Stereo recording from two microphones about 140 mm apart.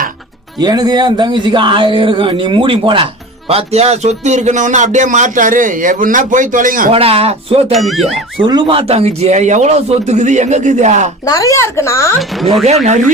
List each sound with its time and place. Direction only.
0.6 s a man's voice: 30° right (ahead or behind); by 6.9 s 75° right (ahead or behind)
6.9 s a man's voice: 45° right (ahead or behind)
7.7 s speech: centre (ahead or behind)
8.4 s a man's voice: 35° right (ahead or behind); by 11.1 s 55° right (ahead or behind)
11.3 s speech: 25° left (ahead or behind)
12.6 s a man's voice: 55° right (ahead or behind)